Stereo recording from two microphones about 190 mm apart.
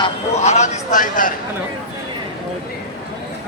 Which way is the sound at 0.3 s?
35° left (ahead or behind).